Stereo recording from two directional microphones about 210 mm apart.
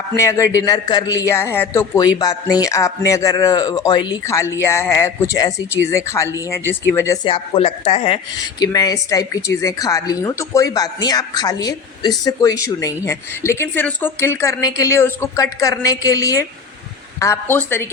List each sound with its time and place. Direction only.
0.2 s speech: 15° left (ahead or behind)
7.3 s speech: 25° left (ahead or behind)